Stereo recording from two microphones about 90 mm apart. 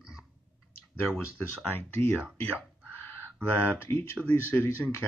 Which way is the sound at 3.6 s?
20° left (ahead or behind).